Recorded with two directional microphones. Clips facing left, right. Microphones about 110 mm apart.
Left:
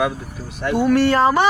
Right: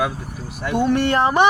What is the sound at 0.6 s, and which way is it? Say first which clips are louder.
Speech: left 3 dB; 20° right (ahead or behind).